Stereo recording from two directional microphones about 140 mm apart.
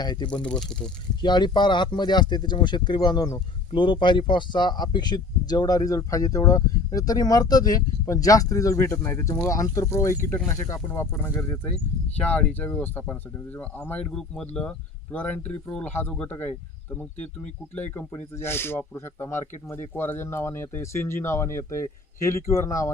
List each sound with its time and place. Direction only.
0.0 s speech: 30° left (ahead or behind)
0.4 s speech: 5° left (ahead or behind)
1.2 s speech: 30° left (ahead or behind)